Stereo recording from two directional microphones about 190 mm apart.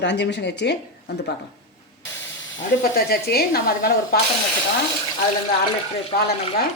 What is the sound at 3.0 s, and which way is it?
Speech, 55° left (ahead or behind).